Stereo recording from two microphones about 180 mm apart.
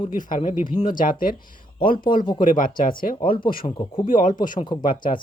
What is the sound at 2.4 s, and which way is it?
Speech, 50° left (ahead or behind).